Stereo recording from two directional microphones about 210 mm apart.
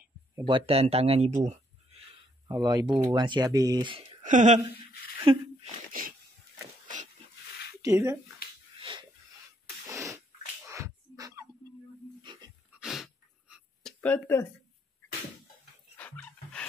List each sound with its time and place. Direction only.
0.0 s speech: 20° right (ahead or behind)
2.4 s speech: 20° right (ahead or behind)
4.2 s speech: 35° right (ahead or behind)
5.2 s a sound: 25° right (ahead or behind)
7.8 s speech: 15° right (ahead or behind)
8.7 s wheeze: 25° right (ahead or behind)
9.8 s sneeze: 15° right (ahead or behind)
10.7 s a sound: 15° right (ahead or behind)
12.2 s dog: 20° right (ahead or behind)
12.8 s a sound: centre (ahead or behind)
16.0 s dog: 5° left (ahead or behind)